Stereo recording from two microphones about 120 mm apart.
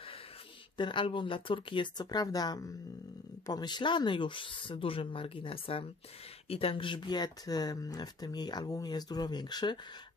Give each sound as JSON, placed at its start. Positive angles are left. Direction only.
{"t": 0.7, "sound": "speech", "side_deg": 40}